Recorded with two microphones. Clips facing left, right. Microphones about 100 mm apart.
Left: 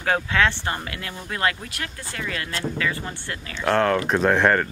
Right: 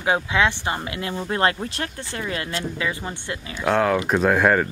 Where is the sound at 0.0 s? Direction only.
15° right (ahead or behind).